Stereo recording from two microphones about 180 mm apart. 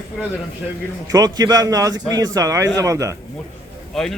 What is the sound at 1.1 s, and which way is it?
A man's voice, 20° right (ahead or behind).